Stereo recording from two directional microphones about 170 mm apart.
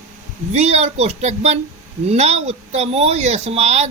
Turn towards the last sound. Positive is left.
turn(degrees=-40)  # may be behind; listen again after turning